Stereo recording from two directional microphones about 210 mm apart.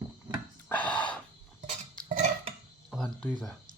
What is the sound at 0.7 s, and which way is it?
Gasp, 5° left (ahead or behind).